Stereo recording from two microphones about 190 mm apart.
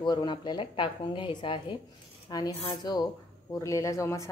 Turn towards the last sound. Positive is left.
turn(degrees=15)  # may be behind; listen again after turning